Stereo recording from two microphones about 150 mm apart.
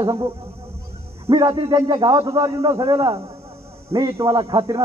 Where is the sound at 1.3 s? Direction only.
30° right (ahead or behind).